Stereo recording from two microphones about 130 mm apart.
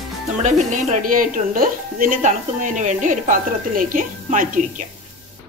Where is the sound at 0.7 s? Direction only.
70° right (ahead or behind).